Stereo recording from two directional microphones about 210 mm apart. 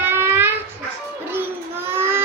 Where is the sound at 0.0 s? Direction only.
10° right (ahead or behind).